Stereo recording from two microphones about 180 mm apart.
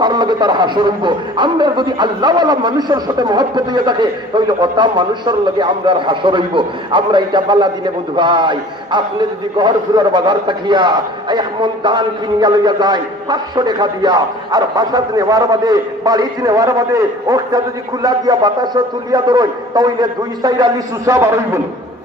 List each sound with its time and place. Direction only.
0.0 s speech: 25° right (ahead or behind)